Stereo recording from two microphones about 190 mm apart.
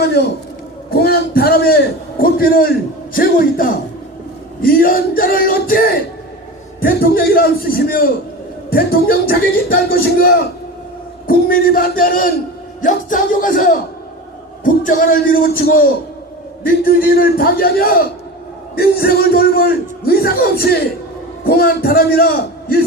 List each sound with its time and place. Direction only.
0.9 s a man's voice: 55° left (ahead or behind)